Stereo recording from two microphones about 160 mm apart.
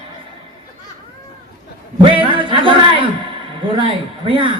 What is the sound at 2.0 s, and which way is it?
A man's voice, 30° right (ahead or behind).